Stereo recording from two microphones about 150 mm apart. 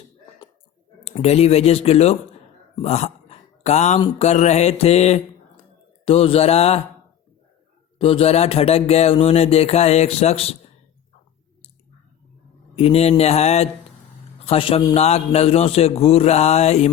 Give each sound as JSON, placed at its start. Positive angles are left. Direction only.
{"t": 1.0, "sound": "speech", "side_deg": 45}
{"t": 2.8, "sound": "a sound", "side_deg": 45}
{"t": 4.2, "sound": "speech", "side_deg": 50}
{"t": 7.9, "sound": "speech", "side_deg": 40}
{"t": 12.7, "sound": "a man's voice", "side_deg": 40}
{"t": 14.9, "sound": "speech", "side_deg": 45}